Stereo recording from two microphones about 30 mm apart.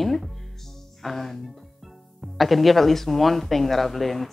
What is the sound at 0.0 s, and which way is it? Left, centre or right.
Music, centre.